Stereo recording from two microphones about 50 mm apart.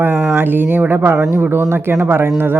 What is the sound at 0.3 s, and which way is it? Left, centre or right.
Speech, right.